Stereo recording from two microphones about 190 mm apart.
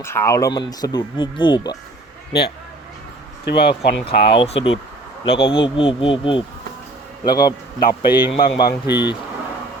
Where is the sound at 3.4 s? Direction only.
60° left (ahead or behind).